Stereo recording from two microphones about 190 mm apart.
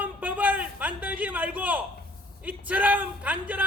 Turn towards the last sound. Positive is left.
turn(degrees=-10)  # may be behind; listen again after turning